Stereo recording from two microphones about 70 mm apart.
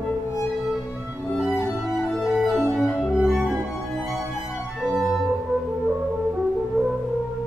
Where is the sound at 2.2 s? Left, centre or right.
Centre.